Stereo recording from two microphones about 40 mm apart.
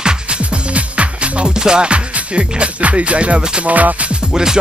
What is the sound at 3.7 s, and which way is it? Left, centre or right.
Speech, right.